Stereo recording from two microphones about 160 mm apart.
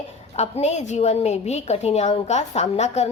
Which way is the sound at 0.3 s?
40° left (ahead or behind).